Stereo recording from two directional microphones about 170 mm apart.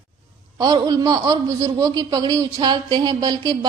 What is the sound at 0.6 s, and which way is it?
A woman's voice, 25° right (ahead or behind).